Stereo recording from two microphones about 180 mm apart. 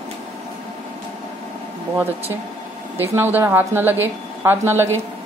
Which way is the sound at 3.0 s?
10° right (ahead or behind).